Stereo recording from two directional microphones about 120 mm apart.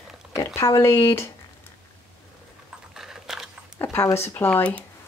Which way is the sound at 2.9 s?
5° right (ahead or behind).